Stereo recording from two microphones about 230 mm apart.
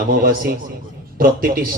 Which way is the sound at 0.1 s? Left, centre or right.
Right.